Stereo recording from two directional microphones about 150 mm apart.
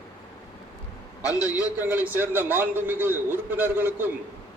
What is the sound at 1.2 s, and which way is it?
Speech, 25° left (ahead or behind).